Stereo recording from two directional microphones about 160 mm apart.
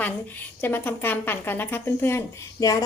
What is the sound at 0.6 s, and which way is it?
Speech, 10° left (ahead or behind).